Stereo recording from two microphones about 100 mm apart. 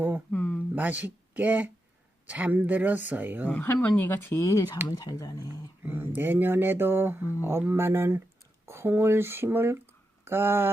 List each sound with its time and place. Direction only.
0.3 s a sound: 15° left (ahead or behind)
0.8 s speech: 15° right (ahead or behind)
3.5 s speech: 15° left (ahead or behind); by 5.5 s 40° left (ahead or behind)
5.8 s speech: 20° right (ahead or behind)